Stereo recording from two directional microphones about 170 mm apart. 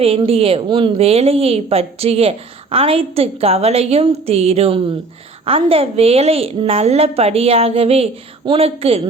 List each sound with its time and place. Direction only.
0.0 s a woman's voice: 35° right (ahead or behind)